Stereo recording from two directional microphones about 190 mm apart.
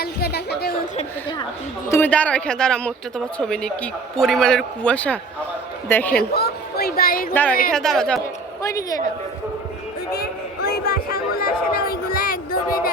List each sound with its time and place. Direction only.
0.0 s a woman's voice: 55° left (ahead or behind)
1.9 s a woman's voice: 10° left (ahead or behind)
6.1 s a woman's voice: 55° left (ahead or behind)
7.7 s speech: centre (ahead or behind)
8.2 s a woman's voice: 15° left (ahead or behind)
10.7 s a sound: 50° left (ahead or behind)